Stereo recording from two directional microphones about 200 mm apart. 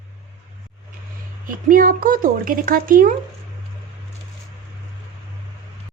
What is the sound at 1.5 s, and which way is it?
Speech, 45° right (ahead or behind).